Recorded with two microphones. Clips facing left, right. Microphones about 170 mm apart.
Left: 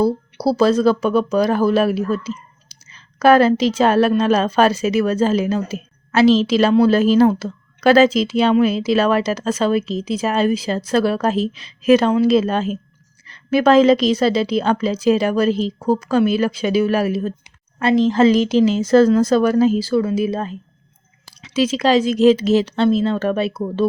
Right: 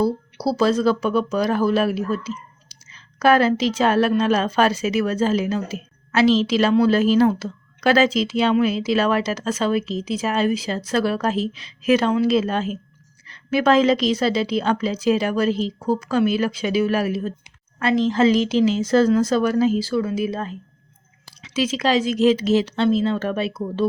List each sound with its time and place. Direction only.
0.4 s a woman's voice: 35° left (ahead or behind)
3.2 s a woman's voice: 40° left (ahead or behind)
21.5 s a woman's voice: 35° left (ahead or behind)